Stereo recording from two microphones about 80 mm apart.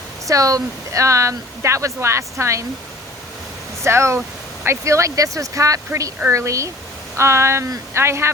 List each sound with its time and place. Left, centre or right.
0.3 s speech: right
3.8 s speech: right